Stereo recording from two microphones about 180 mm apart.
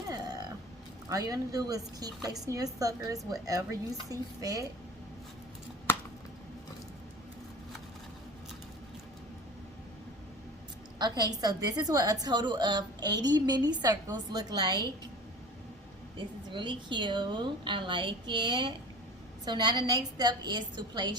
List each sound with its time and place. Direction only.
0.1 s a sound: 20° right (ahead or behind)
1.1 s a woman's voice: 20° right (ahead or behind)
10.9 s a woman's voice: 25° right (ahead or behind)
16.1 s a woman's voice: 25° right (ahead or behind)